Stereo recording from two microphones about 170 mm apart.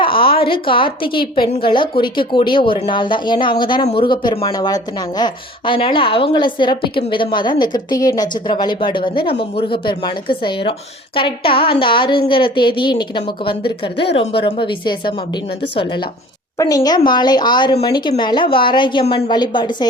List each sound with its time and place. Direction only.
0.0 s speech: 30° left (ahead or behind)